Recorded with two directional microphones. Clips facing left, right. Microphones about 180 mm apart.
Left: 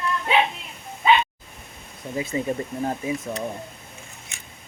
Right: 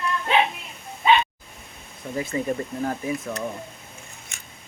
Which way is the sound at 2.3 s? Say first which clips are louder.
Even; 20° left (ahead or behind).